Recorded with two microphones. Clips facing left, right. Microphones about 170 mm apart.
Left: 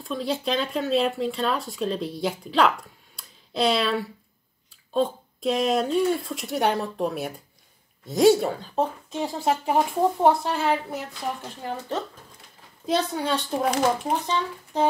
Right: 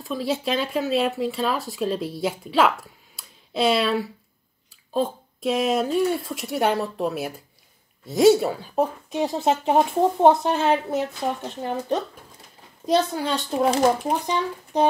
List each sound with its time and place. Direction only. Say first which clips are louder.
0.0 s a woman's voice: right 2 dB; centre (ahead or behind); by 12.0 s 20° right (ahead or behind)
12.8 s speech: right 3 dB; centre (ahead or behind)
14.2 s a child's voice: right 2 dB; 15° right (ahead or behind)